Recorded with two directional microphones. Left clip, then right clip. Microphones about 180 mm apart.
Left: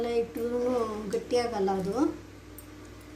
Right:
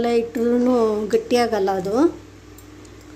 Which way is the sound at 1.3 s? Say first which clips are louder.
Right 6 dB; 50° right (ahead or behind).